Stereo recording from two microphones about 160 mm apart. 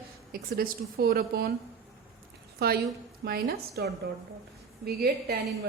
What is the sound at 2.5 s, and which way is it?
A woman's voice, 75° right (ahead or behind).